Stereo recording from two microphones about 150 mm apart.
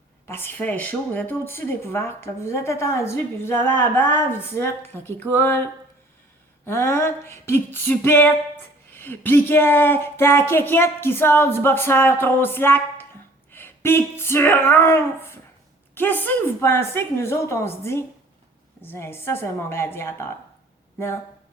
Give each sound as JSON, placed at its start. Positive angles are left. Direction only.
{"t": 0.3, "sound": "speech", "side_deg": 15}
{"t": 6.7, "sound": "speech", "side_deg": 15}